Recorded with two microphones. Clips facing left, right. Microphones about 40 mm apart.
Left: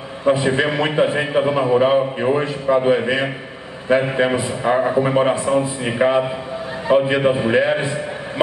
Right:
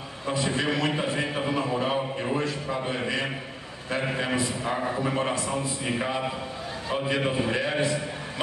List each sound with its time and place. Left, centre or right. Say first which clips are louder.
0.2 s a man's voice: left 11 dB; left